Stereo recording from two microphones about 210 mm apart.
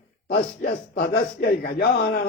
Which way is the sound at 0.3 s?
45° left (ahead or behind).